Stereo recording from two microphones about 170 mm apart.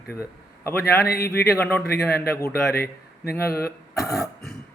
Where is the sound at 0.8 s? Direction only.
65° left (ahead or behind).